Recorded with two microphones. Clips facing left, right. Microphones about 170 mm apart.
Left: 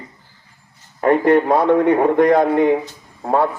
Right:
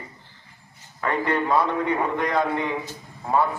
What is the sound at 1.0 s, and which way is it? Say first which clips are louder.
A man's voice: left 10 dB; 40° left (ahead or behind).